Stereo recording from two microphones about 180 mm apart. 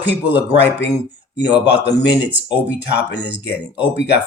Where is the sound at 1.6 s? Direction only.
70° left (ahead or behind).